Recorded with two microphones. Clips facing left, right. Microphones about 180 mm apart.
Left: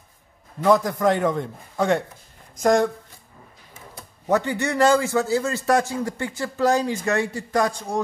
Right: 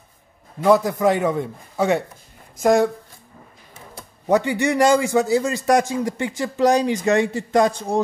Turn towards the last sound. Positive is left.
turn(degrees=-20)  # may be behind; listen again after turning